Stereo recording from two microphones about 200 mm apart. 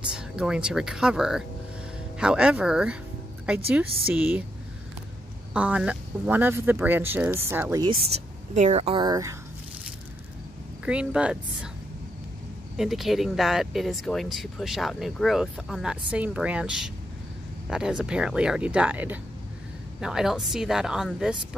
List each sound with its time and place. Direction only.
0.1 s speech: 5° right (ahead or behind)
4.1 s speech: 5° right (ahead or behind)
5.5 s speech: 5° right (ahead or behind)
8.5 s speech: 35° right (ahead or behind); by 9.4 s 15° right (ahead or behind)
10.9 s speech: 5° right (ahead or behind)
12.7 s speech: centre (ahead or behind)